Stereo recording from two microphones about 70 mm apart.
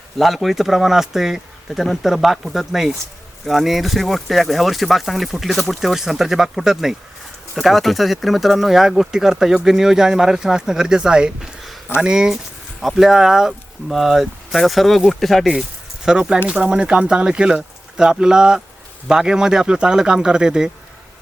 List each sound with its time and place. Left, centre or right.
0.2 s speech: centre
16.0 s speech: centre